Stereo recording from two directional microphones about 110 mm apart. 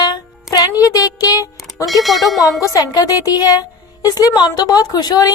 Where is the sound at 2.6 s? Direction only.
35° left (ahead or behind).